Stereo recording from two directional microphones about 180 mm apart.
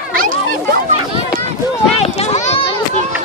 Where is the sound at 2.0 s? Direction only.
35° left (ahead or behind).